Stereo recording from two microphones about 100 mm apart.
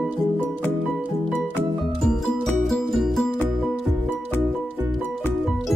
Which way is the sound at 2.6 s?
5° left (ahead or behind).